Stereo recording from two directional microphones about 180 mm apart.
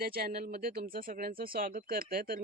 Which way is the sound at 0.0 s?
55° right (ahead or behind).